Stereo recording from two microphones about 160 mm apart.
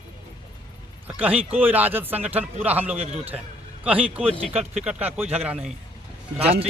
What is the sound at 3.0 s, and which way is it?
Speech, 40° right (ahead or behind).